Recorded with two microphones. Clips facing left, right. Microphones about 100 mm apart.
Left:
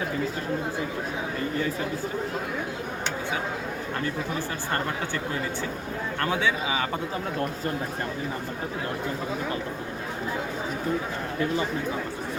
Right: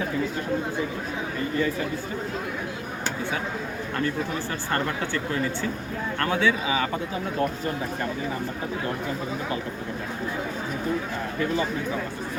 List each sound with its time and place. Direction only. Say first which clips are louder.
6.3 s speech: right 3 dB; 25° left (ahead or behind)